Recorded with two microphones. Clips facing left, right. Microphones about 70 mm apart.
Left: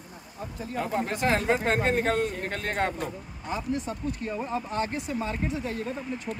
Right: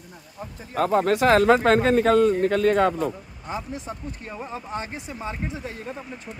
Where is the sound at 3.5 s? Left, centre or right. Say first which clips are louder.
Left 1 dB; right.